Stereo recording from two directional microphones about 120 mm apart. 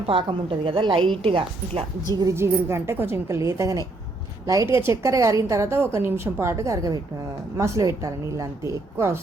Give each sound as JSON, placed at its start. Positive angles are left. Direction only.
{"t": 0.1, "sound": "a woman's voice", "side_deg": -45}
{"t": 2.1, "sound": "a woman's voice", "side_deg": -25}